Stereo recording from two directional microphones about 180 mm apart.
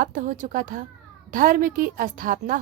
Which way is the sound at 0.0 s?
45° right (ahead or behind).